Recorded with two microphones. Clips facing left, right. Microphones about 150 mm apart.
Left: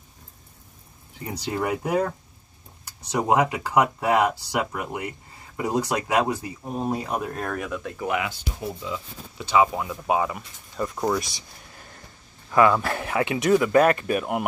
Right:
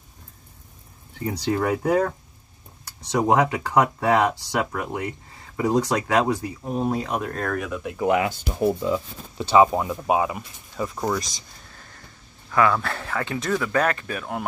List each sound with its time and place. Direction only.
1.4 s speech: 10° left (ahead or behind)
8.3 s speech: 50° right (ahead or behind)
9.4 s speech: 30° right (ahead or behind)
10.3 s speech: centre (ahead or behind)
12.4 s speech: 20° left (ahead or behind)